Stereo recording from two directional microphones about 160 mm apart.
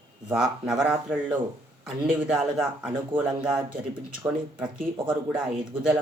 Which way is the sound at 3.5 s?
30° right (ahead or behind).